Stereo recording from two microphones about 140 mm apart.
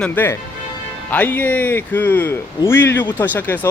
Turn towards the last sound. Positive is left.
turn(degrees=15)  # may be behind; listen again after turning